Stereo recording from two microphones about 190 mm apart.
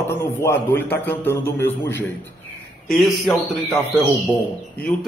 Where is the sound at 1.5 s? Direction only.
70° left (ahead or behind).